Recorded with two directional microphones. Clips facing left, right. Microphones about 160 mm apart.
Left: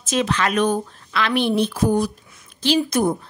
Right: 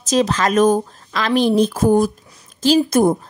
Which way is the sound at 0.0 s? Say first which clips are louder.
Right 4 dB; 40° right (ahead or behind).